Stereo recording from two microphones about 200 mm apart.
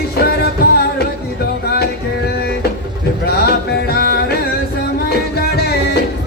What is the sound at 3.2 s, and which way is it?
Music, 50° left (ahead or behind).